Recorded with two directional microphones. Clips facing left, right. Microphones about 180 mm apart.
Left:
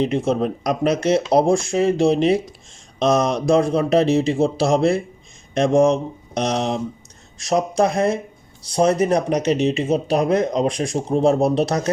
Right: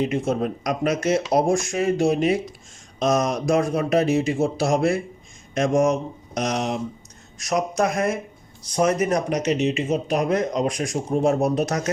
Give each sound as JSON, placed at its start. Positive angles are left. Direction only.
{"t": 0.0, "sound": "speech", "side_deg": 30}